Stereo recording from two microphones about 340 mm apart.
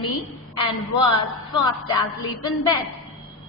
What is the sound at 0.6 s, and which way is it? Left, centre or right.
A woman's voice, centre.